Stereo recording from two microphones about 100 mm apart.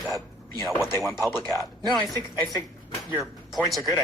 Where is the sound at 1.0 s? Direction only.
Centre (ahead or behind).